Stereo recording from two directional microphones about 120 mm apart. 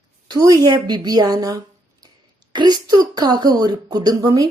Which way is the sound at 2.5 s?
35° right (ahead or behind).